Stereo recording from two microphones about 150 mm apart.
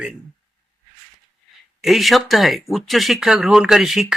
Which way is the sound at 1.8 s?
Centre (ahead or behind).